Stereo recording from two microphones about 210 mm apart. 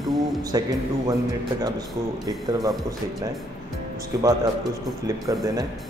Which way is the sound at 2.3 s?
20° right (ahead or behind).